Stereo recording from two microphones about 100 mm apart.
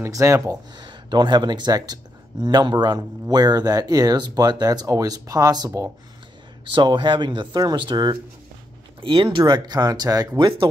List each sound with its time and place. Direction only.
0.0 s speech: 30° right (ahead or behind)
0.7 s speech: 50° right (ahead or behind)
6.7 s speech: 50° right (ahead or behind)